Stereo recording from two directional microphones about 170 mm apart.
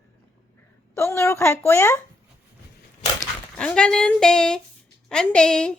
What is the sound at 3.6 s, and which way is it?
Speech, 5° left (ahead or behind).